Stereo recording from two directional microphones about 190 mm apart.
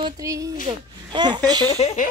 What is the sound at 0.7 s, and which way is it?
Speech, 25° right (ahead or behind).